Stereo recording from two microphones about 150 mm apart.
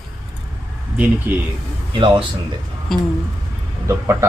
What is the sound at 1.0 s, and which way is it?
Speech, 10° right (ahead or behind).